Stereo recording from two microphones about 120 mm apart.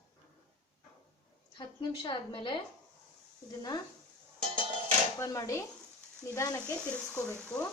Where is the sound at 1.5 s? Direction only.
40° left (ahead or behind).